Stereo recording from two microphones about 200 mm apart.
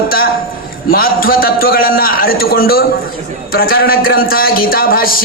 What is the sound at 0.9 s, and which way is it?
Speech, 45° left (ahead or behind).